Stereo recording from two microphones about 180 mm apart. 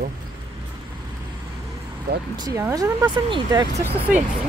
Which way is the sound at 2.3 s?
20° right (ahead or behind).